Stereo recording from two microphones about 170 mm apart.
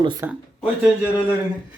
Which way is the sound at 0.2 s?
10° right (ahead or behind).